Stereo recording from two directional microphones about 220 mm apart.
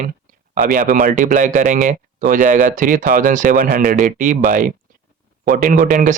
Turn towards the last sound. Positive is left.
turn(degrees=-40)  # may be behind; listen again after turning